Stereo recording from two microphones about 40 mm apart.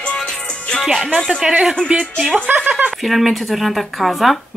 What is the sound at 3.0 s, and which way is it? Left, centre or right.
Speech, centre.